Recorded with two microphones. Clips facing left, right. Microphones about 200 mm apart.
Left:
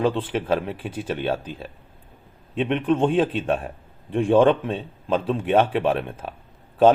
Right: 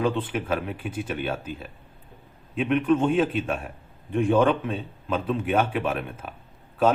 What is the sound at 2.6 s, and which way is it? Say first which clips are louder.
Speech: even; 30° left (ahead or behind).